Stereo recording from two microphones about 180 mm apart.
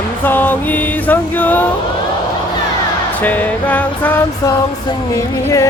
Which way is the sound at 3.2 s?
10° left (ahead or behind).